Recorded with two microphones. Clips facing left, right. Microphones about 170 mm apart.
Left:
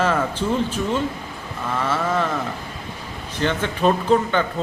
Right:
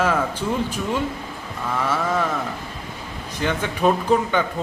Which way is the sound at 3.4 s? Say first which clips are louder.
Left 1 dB; 10° right (ahead or behind).